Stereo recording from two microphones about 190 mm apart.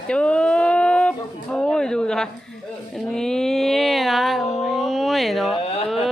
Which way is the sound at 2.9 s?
5° left (ahead or behind).